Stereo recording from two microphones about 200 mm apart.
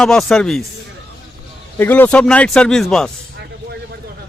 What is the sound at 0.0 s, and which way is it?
Speech, 5° left (ahead or behind).